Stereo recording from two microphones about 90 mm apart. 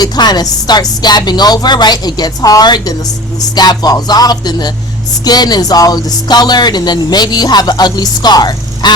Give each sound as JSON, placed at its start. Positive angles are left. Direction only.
{"t": 0.0, "sound": "speech", "side_deg": 50}